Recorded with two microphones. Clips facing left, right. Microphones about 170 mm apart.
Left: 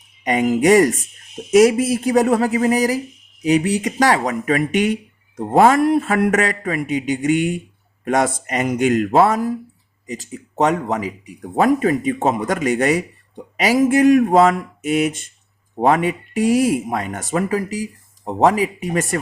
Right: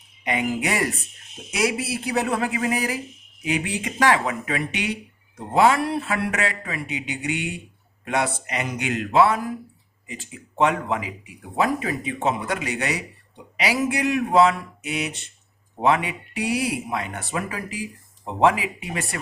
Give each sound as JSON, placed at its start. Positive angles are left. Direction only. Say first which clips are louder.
{"t": 0.3, "sound": "speech", "louder": "left 10 dB", "side_deg": 45}